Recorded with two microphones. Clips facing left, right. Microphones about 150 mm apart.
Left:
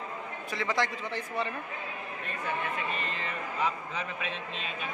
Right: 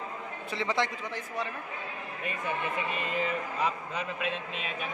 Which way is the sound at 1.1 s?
10° right (ahead or behind).